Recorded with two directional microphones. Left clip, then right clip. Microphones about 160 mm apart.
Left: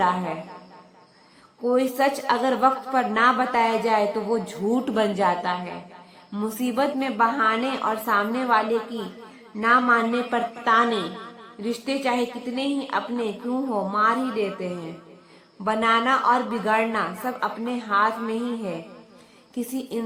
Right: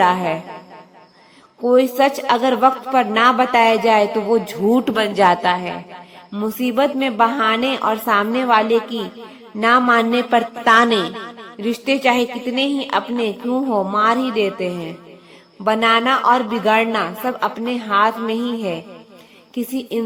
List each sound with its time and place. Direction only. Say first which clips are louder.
0.0 s a woman's voice: right 7 dB; 35° right (ahead or behind)
1.6 s a woman's voice: right 7 dB; 30° right (ahead or behind)
6.3 s a woman's voice: right 6 dB; 20° right (ahead or behind)